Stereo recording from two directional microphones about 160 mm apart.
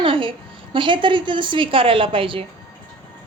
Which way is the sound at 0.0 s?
35° right (ahead or behind).